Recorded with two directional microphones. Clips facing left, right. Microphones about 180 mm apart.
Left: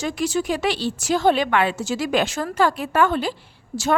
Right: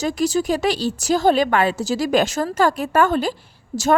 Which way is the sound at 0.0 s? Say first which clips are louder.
Right 3 dB; 40° right (ahead or behind).